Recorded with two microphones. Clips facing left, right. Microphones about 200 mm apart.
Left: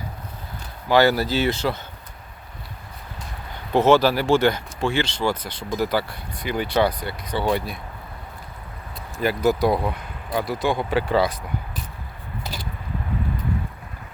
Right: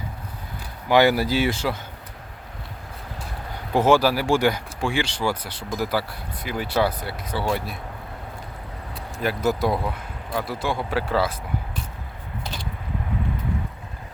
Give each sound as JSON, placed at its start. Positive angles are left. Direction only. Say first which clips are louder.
{"t": 0.9, "sound": "speech", "louder": "even", "side_deg": -15}
{"t": 3.7, "sound": "speech", "louder": "left 2 dB", "side_deg": -10}
{"t": 9.1, "sound": "speech", "louder": "left 3 dB", "side_deg": 0}
{"t": 12.4, "sound": "a sound", "louder": "left 1 dB", "side_deg": 5}